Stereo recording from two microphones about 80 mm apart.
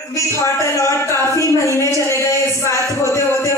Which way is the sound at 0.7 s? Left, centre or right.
Left.